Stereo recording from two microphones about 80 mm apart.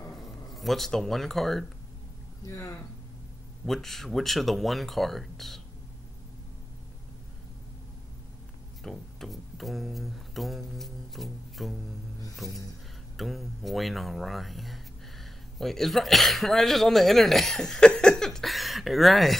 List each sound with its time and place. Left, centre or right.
0.1 s speech: centre
2.4 s speech: left
3.6 s speech: centre
8.8 s speech: centre